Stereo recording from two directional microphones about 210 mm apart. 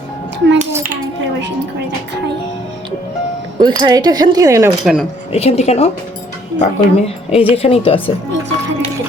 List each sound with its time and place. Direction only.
3.6 s speech: 20° right (ahead or behind)
4.8 s speech: centre (ahead or behind)
5.3 s a woman's voice: 30° left (ahead or behind)